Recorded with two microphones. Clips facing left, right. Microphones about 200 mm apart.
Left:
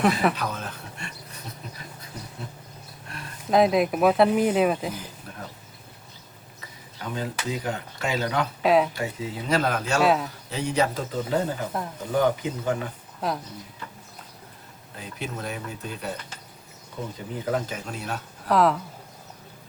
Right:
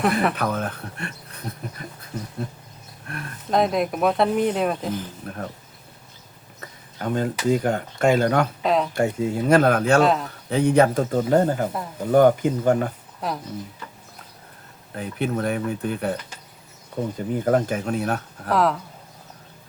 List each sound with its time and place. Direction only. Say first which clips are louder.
0.3 s speech: right 6 dB; 55° right (ahead or behind)
3.1 s a sound: right 6 dB; 55° right (ahead or behind)
3.5 s speech: left 1 dB; centre (ahead or behind)
5.2 s speech: right 8 dB; 55° right (ahead or behind)
6.6 s speech: right 7 dB; 50° right (ahead or behind)
8.6 s speech: left 6 dB; 5° left (ahead or behind)
8.9 s speech: right 9 dB; 50° right (ahead or behind)
10.0 s speech: right 2 dB; 5° left (ahead or behind)
10.5 s speech: right 8 dB; 55° right (ahead or behind)
13.2 s speech: even; centre (ahead or behind)
14.9 s speech: right 9 dB; 55° right (ahead or behind)
17.2 s speech: right 7 dB; 55° right (ahead or behind)
18.4 s speech: even; centre (ahead or behind)